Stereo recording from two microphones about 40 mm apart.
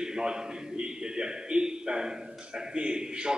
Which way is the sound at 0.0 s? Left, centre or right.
Centre.